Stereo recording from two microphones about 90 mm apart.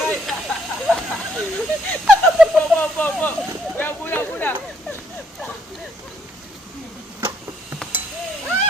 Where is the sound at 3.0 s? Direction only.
20° left (ahead or behind).